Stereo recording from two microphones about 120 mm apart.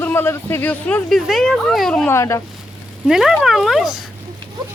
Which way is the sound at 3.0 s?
5° right (ahead or behind).